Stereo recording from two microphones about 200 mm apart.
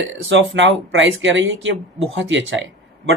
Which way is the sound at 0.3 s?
65° right (ahead or behind).